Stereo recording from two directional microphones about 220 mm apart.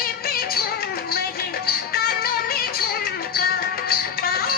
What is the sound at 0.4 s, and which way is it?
Music, 45° left (ahead or behind).